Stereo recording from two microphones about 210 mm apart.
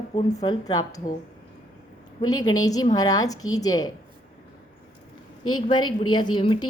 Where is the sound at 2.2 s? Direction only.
20° left (ahead or behind).